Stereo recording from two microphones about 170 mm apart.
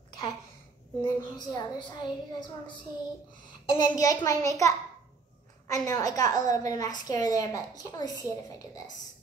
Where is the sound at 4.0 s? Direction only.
20° left (ahead or behind).